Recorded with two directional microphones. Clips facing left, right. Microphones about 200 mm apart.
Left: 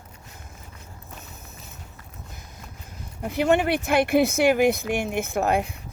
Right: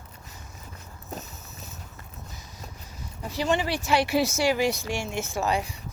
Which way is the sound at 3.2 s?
55° left (ahead or behind).